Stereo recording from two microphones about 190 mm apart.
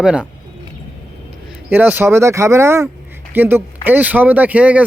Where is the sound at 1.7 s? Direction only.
10° right (ahead or behind).